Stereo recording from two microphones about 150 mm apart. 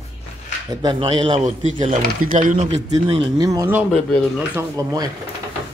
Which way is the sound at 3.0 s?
35° right (ahead or behind).